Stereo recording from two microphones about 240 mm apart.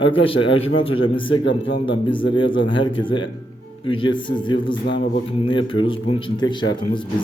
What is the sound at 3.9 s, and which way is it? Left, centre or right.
Speech, left.